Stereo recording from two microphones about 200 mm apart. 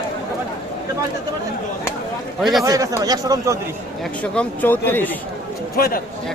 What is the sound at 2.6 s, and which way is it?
Speech, 15° right (ahead or behind).